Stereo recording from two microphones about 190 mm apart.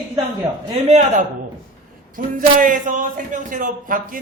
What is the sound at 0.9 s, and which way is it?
A man's voice, 35° right (ahead or behind).